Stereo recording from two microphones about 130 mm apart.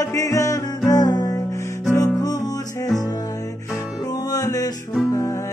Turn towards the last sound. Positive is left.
turn(degrees=20)  # may be behind; listen again after turning